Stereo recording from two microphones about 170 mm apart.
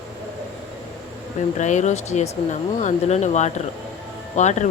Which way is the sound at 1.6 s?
45° left (ahead or behind).